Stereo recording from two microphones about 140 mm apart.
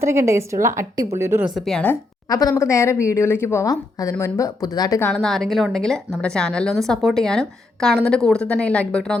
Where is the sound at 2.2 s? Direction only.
25° left (ahead or behind).